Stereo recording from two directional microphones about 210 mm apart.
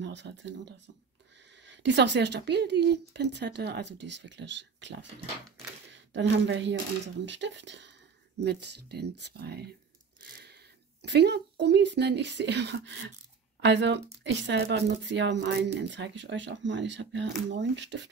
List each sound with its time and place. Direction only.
0.0 s speech: 60° right (ahead or behind)
1.7 s speech: 60° right (ahead or behind)
6.1 s speech: 60° right (ahead or behind)